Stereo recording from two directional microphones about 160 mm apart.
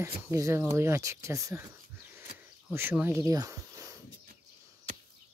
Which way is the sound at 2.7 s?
15° right (ahead or behind).